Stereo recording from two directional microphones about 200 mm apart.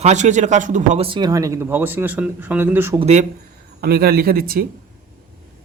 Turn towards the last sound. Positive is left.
turn(degrees=-50)  # may be behind; listen again after turning